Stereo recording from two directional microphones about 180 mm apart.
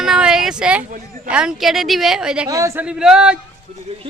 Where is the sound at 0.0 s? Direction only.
5° right (ahead or behind).